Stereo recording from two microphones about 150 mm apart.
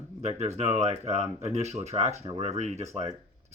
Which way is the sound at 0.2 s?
45° right (ahead or behind).